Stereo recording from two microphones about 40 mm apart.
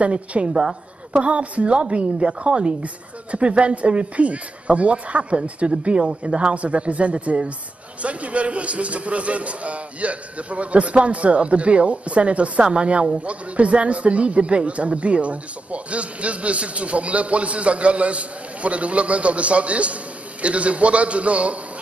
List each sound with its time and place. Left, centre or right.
0.0 s a man's voice: right